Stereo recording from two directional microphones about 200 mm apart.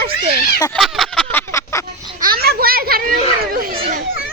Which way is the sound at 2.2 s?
50° right (ahead or behind).